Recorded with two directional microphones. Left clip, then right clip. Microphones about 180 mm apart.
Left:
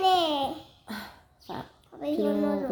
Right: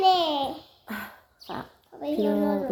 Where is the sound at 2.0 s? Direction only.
20° left (ahead or behind).